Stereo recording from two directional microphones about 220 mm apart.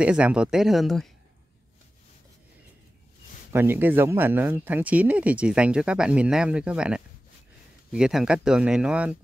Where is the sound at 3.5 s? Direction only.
10° right (ahead or behind).